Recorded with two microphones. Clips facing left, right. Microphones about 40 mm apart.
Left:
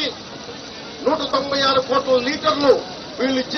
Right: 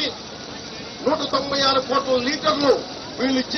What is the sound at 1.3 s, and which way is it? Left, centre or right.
A man's voice, centre.